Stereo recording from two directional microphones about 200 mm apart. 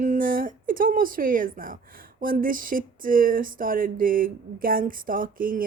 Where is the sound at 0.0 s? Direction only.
40° right (ahead or behind).